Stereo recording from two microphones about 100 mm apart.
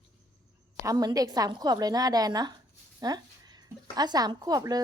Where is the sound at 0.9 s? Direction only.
40° right (ahead or behind).